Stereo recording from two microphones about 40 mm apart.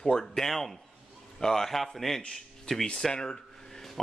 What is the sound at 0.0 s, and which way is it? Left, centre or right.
A man's voice, centre.